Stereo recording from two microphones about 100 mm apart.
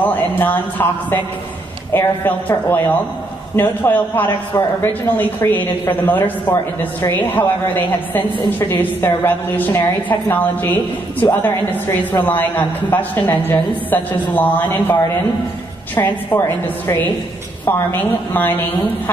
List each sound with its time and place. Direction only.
0.0 s a man's voice: 20° left (ahead or behind)